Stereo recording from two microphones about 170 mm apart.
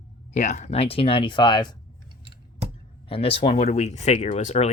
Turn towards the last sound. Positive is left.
turn(degrees=40)  # may be behind; listen again after turning